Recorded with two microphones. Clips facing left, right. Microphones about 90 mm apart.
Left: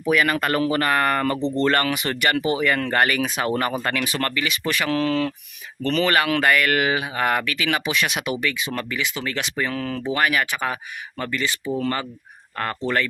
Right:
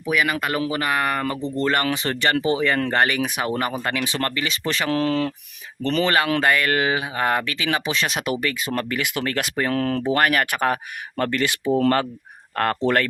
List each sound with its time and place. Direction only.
0.1 s speech: 10° right (ahead or behind)
1.9 s speech: 30° right (ahead or behind); by 13.1 s 55° right (ahead or behind)